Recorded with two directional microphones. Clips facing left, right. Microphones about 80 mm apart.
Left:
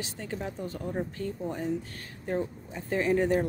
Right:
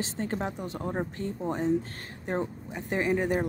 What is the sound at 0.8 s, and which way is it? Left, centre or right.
A woman's voice, right.